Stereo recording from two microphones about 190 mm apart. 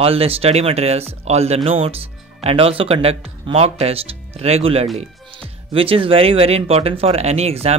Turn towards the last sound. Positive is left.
turn(degrees=-35)  # may be behind; listen again after turning